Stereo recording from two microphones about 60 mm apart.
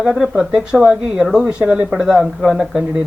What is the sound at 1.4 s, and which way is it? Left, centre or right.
Speech, centre.